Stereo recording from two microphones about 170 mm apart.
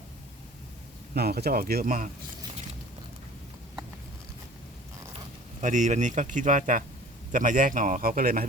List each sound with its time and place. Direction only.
1.1 s speech: 70° right (ahead or behind)
5.5 s speech: 45° right (ahead or behind)